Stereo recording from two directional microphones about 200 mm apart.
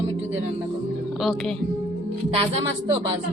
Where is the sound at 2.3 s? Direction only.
30° right (ahead or behind).